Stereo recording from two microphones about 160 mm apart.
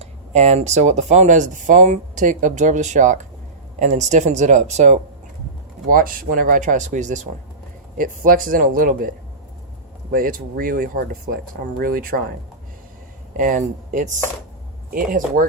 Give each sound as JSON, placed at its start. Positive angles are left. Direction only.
{"t": 0.0, "sound": "speech", "side_deg": -45}
{"t": 5.9, "sound": "speech", "side_deg": -65}
{"t": 13.3, "sound": "speech", "side_deg": -55}